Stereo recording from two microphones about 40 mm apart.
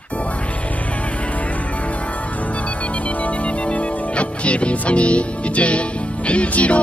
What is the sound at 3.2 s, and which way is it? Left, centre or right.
Music, left.